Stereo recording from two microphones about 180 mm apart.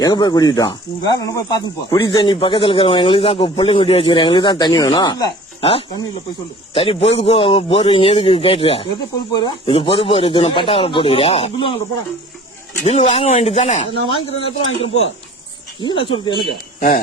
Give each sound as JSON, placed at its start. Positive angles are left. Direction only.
{"t": 0.0, "sound": "a man's voice", "side_deg": 20}
{"t": 12.8, "sound": "a man's voice", "side_deg": 40}